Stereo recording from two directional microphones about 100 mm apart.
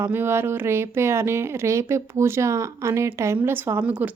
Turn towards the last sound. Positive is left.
turn(degrees=-20)  # may be behind; listen again after turning